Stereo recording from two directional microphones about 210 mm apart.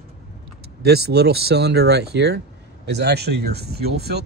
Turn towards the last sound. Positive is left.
turn(degrees=-50)  # may be behind; listen again after turning